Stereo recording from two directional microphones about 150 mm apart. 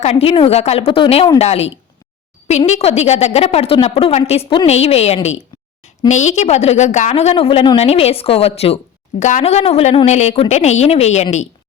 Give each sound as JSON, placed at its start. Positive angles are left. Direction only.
{"t": 0.0, "sound": "a woman's voice", "side_deg": 45}